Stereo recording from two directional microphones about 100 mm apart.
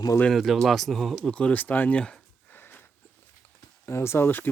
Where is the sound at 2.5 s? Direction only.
20° left (ahead or behind).